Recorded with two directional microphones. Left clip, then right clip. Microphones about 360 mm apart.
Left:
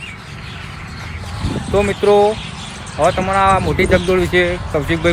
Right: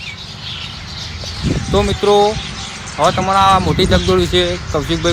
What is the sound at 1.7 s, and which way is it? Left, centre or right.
Speech, centre.